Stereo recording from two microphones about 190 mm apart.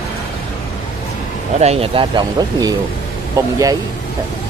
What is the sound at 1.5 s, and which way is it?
Speech, 35° right (ahead or behind).